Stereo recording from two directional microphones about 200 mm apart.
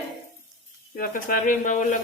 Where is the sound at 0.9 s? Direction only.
45° left (ahead or behind).